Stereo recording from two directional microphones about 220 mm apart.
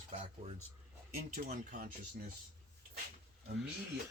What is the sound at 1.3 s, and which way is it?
Speech, 40° right (ahead or behind).